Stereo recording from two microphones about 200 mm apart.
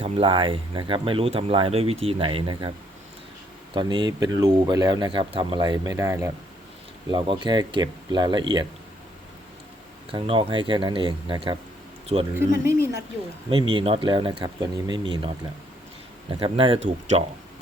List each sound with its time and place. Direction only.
0.0 s speech: 25° right (ahead or behind)
3.8 s speech: 20° right (ahead or behind)
10.1 s speech: 25° right (ahead or behind)
12.3 s speech: 15° right (ahead or behind)
13.5 s speech: 25° right (ahead or behind)